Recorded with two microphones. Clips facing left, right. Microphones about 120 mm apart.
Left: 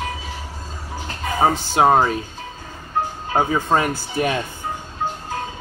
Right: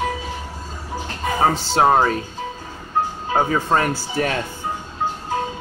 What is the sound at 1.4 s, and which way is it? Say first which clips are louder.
Speech: left 1 dB; 15° left (ahead or behind).